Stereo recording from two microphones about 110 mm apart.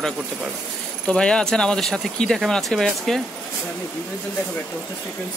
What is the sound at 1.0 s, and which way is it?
Speech, 10° left (ahead or behind).